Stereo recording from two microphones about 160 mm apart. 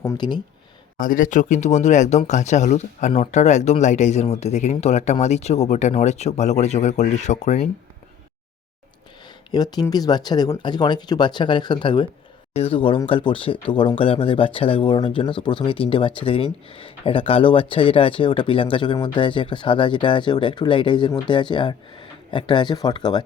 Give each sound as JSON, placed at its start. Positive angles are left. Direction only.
{"t": 0.0, "sound": "speech", "side_deg": 25}
{"t": 0.9, "sound": "speech", "side_deg": 55}
{"t": 9.2, "sound": "speech", "side_deg": 25}